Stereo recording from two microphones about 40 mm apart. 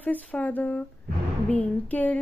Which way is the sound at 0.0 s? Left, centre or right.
Left.